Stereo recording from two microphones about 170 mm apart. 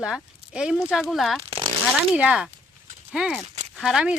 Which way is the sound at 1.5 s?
30° right (ahead or behind).